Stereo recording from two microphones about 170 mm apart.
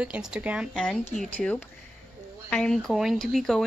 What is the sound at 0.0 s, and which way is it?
Speech, 5° right (ahead or behind).